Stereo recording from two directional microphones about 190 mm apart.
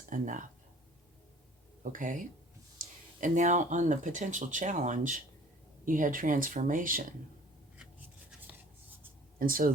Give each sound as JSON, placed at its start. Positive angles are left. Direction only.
{"t": 0.1, "sound": "speech", "side_deg": -45}
{"t": 1.8, "sound": "speech", "side_deg": -45}
{"t": 9.4, "sound": "speech", "side_deg": -50}